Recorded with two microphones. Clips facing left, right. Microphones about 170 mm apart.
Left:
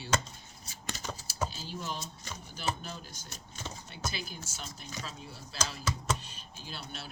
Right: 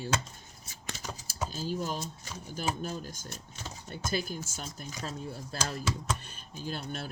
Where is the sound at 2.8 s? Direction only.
45° right (ahead or behind).